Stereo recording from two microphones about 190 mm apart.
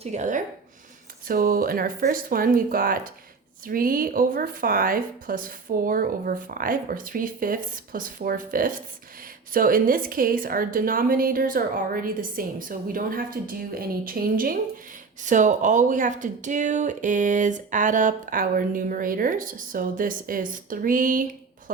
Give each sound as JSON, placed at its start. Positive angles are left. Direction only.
{"t": 0.0, "sound": "speech", "side_deg": -40}